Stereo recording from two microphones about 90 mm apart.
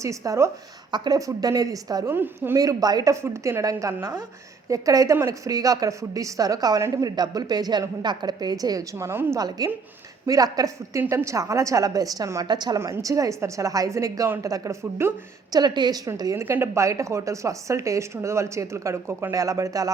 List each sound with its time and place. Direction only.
0.0 s a woman's voice: 35° right (ahead or behind)
0.9 s a woman's voice: 50° right (ahead or behind)
2.0 s a woman's voice: 25° right (ahead or behind)
2.6 s a woman's voice: 45° right (ahead or behind)
9.6 s a woman's voice: 45° right (ahead or behind)
12.8 s a woman's voice: 35° right (ahead or behind)
15.5 s a woman's voice: 55° right (ahead or behind)
16.1 s a woman's voice: 40° right (ahead or behind)